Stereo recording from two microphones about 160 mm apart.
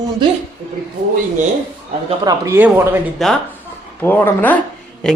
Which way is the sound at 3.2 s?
Centre (ahead or behind).